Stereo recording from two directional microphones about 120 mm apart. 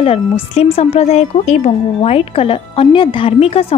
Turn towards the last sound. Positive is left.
turn(degrees=55)  # may be behind; listen again after turning